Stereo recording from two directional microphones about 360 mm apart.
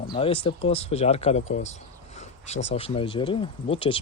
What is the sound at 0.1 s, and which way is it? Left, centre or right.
Speech, centre.